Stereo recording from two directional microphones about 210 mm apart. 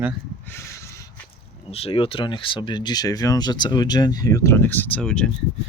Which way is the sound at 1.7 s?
25° left (ahead or behind).